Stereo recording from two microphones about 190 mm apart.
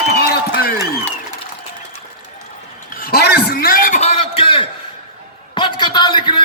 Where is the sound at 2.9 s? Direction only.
55° left (ahead or behind).